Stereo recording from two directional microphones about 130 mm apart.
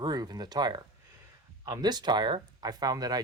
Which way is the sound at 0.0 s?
30° right (ahead or behind).